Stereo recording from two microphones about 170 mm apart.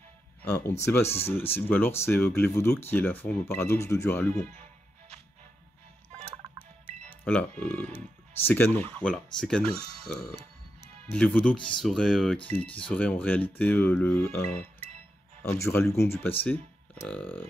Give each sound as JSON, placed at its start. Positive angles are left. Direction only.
{"t": 0.4, "sound": "speech", "side_deg": 10}
{"t": 7.2, "sound": "speech", "side_deg": 10}
{"t": 9.8, "sound": "speech", "side_deg": -35}
{"t": 10.1, "sound": "music", "side_deg": 80}
{"t": 11.1, "sound": "speech", "side_deg": 5}